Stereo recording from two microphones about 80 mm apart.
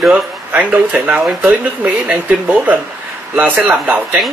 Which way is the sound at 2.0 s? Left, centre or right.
Centre.